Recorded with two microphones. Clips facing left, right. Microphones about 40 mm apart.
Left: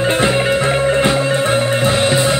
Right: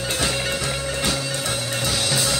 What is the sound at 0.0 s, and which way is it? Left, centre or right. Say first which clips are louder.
Music: left 10 dB; left.